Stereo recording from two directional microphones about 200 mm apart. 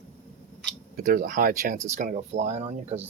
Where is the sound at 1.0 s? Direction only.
45° right (ahead or behind).